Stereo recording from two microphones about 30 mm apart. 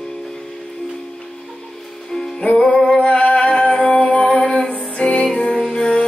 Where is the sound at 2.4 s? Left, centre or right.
Left.